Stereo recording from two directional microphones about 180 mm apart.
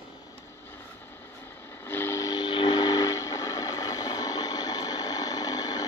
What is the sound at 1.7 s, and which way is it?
Train, 10° left (ahead or behind).